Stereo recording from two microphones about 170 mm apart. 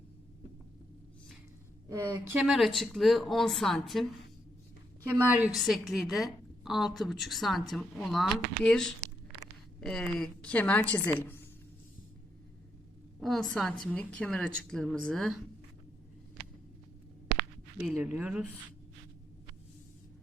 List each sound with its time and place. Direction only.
1.9 s a woman's voice: 20° right (ahead or behind)
2.4 s a woman's voice: centre (ahead or behind)
5.1 s speech: 10° right (ahead or behind)
5.5 s a woman's voice: centre (ahead or behind)
13.1 s a woman's voice: centre (ahead or behind)
17.7 s speech: 10° right (ahead or behind)